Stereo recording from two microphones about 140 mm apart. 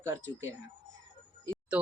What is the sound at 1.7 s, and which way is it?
Speech, 10° right (ahead or behind).